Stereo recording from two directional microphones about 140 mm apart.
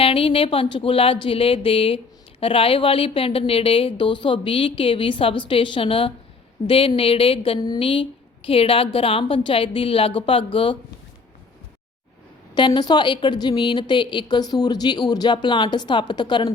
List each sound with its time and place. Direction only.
0.0 s a woman's voice: 40° left (ahead or behind)
12.5 s a woman's voice: 35° left (ahead or behind)